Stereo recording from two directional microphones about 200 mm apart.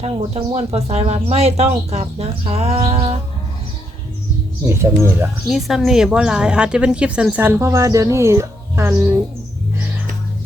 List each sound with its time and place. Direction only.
0.0 s speech: 30° right (ahead or behind)
4.6 s speech: 15° right (ahead or behind)
5.5 s a woman's voice: centre (ahead or behind)